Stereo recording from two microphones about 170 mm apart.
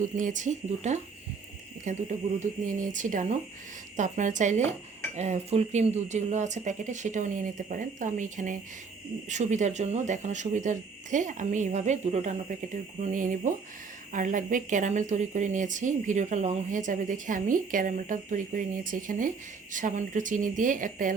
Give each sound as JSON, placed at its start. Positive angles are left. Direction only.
{"t": 0.0, "sound": "a woman's voice", "side_deg": -50}